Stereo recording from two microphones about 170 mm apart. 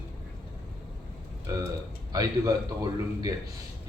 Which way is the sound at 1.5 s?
20° right (ahead or behind).